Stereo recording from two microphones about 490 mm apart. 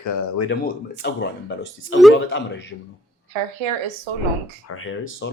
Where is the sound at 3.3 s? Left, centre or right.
Right.